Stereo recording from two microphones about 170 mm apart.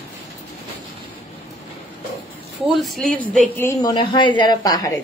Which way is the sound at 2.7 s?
Centre (ahead or behind).